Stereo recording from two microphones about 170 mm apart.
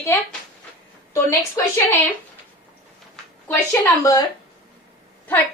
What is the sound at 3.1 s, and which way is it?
Speech, 10° left (ahead or behind).